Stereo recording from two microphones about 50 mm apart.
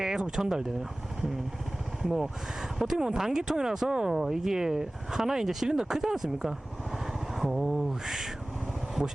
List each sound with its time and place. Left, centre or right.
0.0 s speech: centre
2.0 s speech: centre
7.3 s a sound: centre
9.0 s speech: centre